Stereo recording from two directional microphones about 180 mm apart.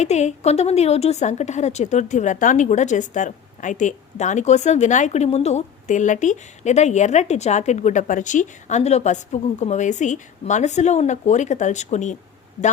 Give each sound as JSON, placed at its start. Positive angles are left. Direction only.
{"t": 0.0, "sound": "a woman's voice", "side_deg": 40}